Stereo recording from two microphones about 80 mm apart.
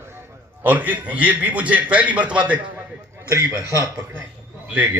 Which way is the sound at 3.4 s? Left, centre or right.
Right.